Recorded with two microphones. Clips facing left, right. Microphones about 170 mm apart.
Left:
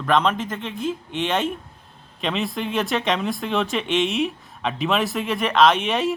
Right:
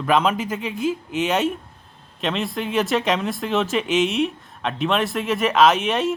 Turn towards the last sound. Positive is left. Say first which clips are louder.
# right 1 dB
turn(degrees=0)  # may be behind; listen again after turning